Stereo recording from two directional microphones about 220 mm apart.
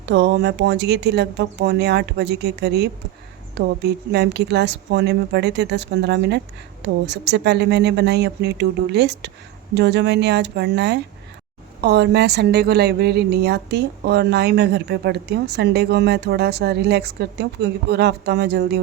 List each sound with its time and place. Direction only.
0.0 s a woman's voice: 50° right (ahead or behind)